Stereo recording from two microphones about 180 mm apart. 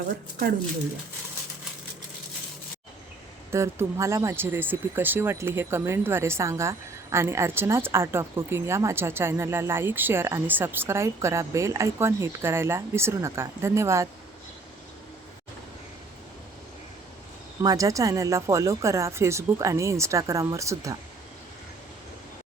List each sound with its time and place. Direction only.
3.5 s speech: 15° right (ahead or behind)
17.6 s speech: 20° right (ahead or behind)